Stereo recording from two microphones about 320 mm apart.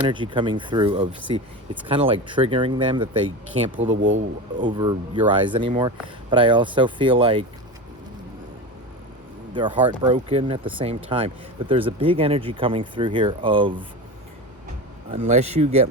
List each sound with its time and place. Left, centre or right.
0.1 s speech: centre
3.8 s speech: right
4.5 s speech: centre
9.5 s speech: centre
15.1 s speech: centre